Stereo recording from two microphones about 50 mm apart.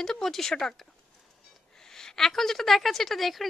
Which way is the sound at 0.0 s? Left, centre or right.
Centre.